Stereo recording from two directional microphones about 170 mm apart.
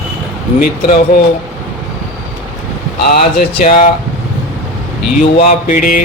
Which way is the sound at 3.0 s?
65° left (ahead or behind).